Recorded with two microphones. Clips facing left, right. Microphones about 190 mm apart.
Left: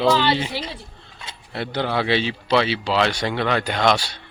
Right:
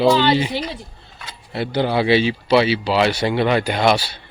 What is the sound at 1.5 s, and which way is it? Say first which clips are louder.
Speech: right 4 dB; 5° right (ahead or behind).